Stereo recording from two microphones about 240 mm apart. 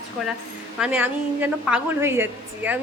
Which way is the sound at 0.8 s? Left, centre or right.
Centre.